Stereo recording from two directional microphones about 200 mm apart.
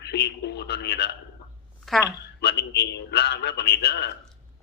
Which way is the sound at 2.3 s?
55° left (ahead or behind).